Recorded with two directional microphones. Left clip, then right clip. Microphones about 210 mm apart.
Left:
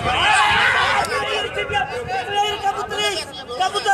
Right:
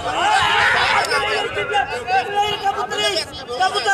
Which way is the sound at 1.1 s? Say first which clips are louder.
Right 2 dB; 40° right (ahead or behind).